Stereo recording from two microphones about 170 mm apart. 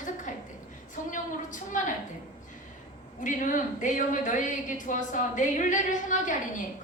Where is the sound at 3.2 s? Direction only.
50° left (ahead or behind).